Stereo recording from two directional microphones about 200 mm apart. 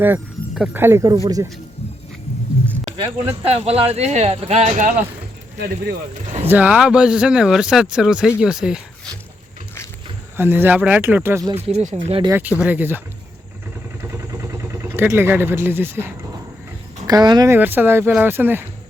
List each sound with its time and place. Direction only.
0.0 s speech: 5° right (ahead or behind)
2.8 s speech: 30° right (ahead or behind)
6.5 s speech: 5° right (ahead or behind)
10.3 s speech: 10° right (ahead or behind)
11.5 s speech: 35° right (ahead or behind)
12.3 s speech: 10° right (ahead or behind)
14.0 s vehicle: 15° right (ahead or behind)
17.1 s speech: 20° right (ahead or behind)